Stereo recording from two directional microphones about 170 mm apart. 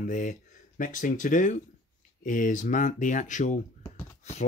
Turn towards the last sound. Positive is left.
turn(degrees=40)  # may be behind; listen again after turning